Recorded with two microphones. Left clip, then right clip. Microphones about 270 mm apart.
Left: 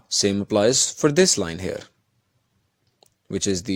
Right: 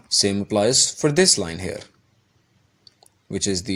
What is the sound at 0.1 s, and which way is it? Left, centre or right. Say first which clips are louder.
Speech: right 1 dB; left.